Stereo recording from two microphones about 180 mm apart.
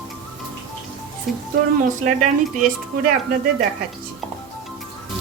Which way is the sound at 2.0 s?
45° right (ahead or behind).